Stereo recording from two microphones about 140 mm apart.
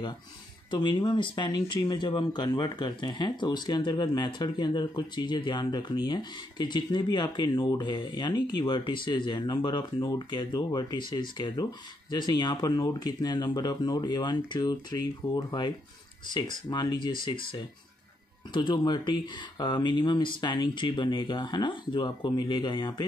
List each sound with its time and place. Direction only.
0.7 s speech: 30° left (ahead or behind)